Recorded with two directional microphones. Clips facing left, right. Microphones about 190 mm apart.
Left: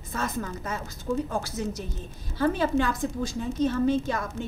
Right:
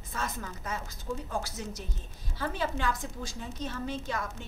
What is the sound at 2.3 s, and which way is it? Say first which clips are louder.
A woman's voice: left 9 dB; 50° left (ahead or behind).